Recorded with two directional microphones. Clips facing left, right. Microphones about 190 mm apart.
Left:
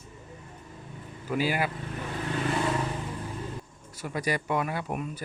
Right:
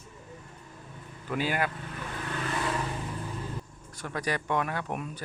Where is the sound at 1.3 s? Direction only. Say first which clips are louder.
Left 2 dB; 10° left (ahead or behind).